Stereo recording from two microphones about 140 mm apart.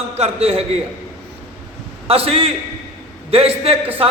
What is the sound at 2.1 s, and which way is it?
A man's voice, 45° right (ahead or behind).